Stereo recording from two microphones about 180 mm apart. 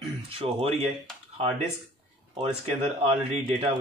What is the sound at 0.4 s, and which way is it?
Speech, 35° right (ahead or behind).